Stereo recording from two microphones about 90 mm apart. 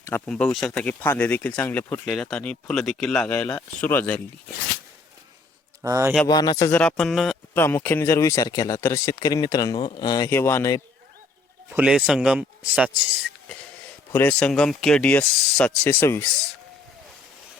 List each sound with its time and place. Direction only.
0.3 s speech: 10° left (ahead or behind)
2.0 s speech: 5° left (ahead or behind)
3.2 s speech: 25° left (ahead or behind)
5.8 s a man's voice: 35° right (ahead or behind)
6.2 s speech: 50° left (ahead or behind)
6.7 s speech: 15° left (ahead or behind)
6.9 s speech: 5° left (ahead or behind)
7.5 s speech: 25° left (ahead or behind); by 10.2 s 50° left (ahead or behind)
10.2 s speech: 30° left (ahead or behind)
11.8 s speech: 5° right (ahead or behind)
14.1 s a man's voice: 25° left (ahead or behind)
14.3 s speech: 10° left (ahead or behind)
16.0 s speech: 30° left (ahead or behind)